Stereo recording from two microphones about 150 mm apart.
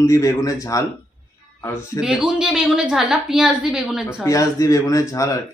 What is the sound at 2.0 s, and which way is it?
A woman's voice, 5° right (ahead or behind).